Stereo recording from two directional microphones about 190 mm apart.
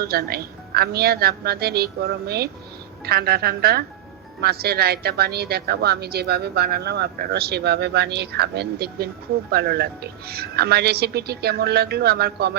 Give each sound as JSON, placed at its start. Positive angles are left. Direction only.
{"t": 0.0, "sound": "a woman's voice", "side_deg": -55}